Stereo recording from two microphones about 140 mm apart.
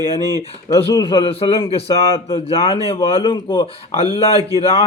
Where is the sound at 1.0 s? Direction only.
40° left (ahead or behind).